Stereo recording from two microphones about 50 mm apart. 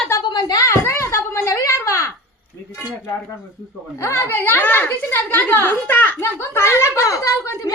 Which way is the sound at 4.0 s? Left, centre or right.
Left.